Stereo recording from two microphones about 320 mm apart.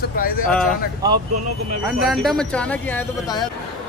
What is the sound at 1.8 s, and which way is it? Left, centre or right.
Speech, centre.